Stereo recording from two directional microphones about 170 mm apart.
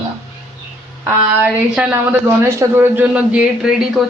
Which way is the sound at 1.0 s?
10° right (ahead or behind).